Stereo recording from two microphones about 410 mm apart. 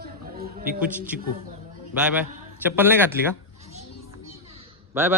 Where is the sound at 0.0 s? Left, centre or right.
Right.